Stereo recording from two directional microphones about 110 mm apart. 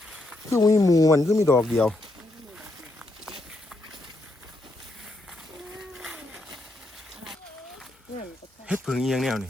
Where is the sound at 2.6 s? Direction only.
5° right (ahead or behind).